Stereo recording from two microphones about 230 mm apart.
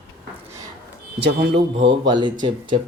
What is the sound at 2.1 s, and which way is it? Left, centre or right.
Speech, centre.